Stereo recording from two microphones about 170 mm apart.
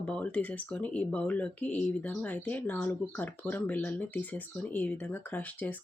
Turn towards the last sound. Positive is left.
turn(degrees=10)  # may be behind; listen again after turning